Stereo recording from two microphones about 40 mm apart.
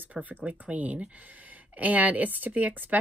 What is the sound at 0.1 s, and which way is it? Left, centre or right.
Speech, right.